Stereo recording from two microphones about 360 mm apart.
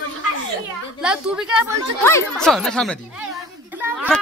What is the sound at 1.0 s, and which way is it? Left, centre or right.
Speech, centre.